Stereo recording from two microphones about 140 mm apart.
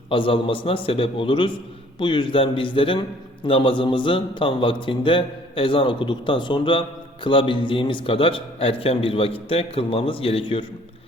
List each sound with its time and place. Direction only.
0.1 s a man's voice: 40° left (ahead or behind)